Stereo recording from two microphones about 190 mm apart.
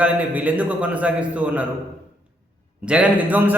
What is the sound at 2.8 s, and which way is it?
Speech, 5° right (ahead or behind).